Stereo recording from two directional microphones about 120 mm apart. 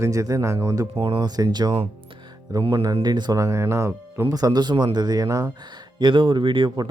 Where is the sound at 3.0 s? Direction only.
35° right (ahead or behind).